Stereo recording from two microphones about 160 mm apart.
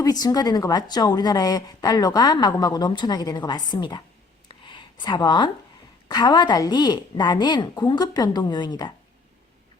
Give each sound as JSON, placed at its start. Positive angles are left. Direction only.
{"t": 0.0, "sound": "a woman's voice", "side_deg": 25}
{"t": 4.4, "sound": "a sound", "side_deg": 30}
{"t": 6.1, "sound": "a woman's voice", "side_deg": 25}